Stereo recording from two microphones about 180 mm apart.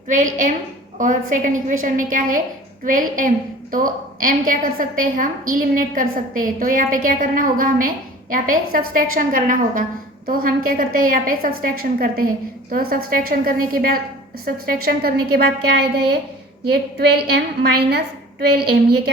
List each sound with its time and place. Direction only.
0.1 s a woman's voice: 45° right (ahead or behind); by 19.1 s 60° right (ahead or behind)